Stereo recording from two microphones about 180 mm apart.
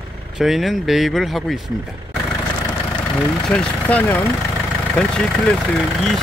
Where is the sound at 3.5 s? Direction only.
5° left (ahead or behind).